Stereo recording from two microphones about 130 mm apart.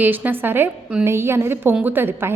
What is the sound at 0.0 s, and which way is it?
A woman's voice, 15° right (ahead or behind).